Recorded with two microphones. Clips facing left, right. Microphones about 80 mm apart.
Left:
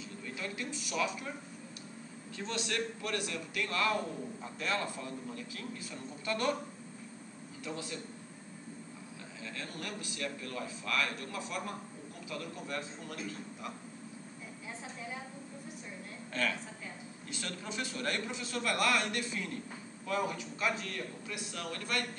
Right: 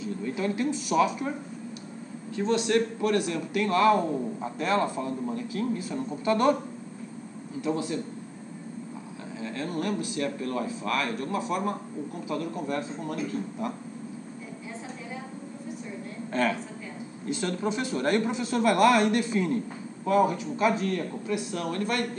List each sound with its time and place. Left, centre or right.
0.2 s a sound: right
0.9 s speech: right
2.3 s a man's voice: centre
2.7 s a man's voice: right
7.7 s speech: right
9.4 s a man's voice: right
17.3 s a man's voice: right